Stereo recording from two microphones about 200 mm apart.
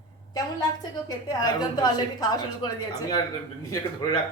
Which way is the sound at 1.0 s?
20° left (ahead or behind).